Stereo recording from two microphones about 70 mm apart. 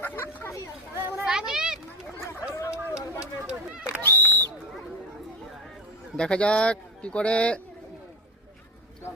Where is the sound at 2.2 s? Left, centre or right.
Left.